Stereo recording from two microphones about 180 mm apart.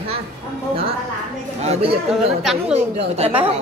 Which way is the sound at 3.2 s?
30° right (ahead or behind).